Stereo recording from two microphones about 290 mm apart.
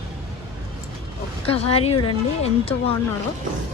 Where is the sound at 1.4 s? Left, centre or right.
Centre.